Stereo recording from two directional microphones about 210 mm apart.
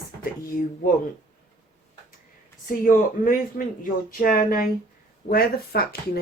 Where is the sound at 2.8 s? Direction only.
40° left (ahead or behind).